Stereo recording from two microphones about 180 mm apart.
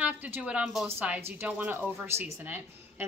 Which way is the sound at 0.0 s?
10° right (ahead or behind).